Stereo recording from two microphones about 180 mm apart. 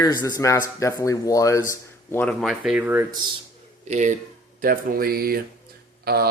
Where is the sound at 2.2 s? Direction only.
Centre (ahead or behind).